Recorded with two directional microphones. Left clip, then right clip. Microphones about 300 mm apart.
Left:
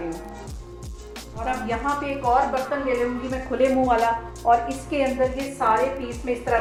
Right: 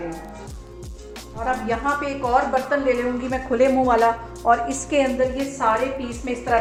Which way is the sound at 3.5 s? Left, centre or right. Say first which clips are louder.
Right 2 dB; right.